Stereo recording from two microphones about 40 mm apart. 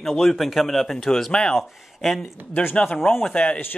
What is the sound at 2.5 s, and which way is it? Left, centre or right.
Speech, left.